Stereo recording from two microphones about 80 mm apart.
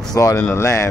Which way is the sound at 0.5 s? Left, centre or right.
Left.